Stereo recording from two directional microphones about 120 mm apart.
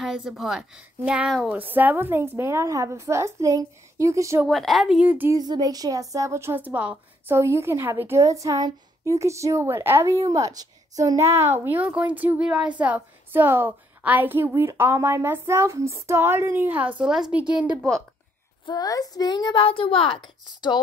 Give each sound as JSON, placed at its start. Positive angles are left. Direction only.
{"t": 0.0, "sound": "a woman's voice", "side_deg": -5}
{"t": 4.5, "sound": "a woman's voice", "side_deg": 0}
{"t": 5.3, "sound": "a woman's voice", "side_deg": -35}
{"t": 17.0, "sound": "a woman's voice", "side_deg": -5}
{"t": 18.7, "sound": "a child's voice", "side_deg": 30}